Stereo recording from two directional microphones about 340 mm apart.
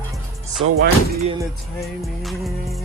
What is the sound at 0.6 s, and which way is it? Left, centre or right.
Speech, right.